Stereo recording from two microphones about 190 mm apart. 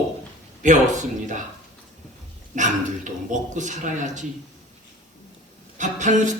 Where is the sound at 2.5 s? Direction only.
40° right (ahead or behind).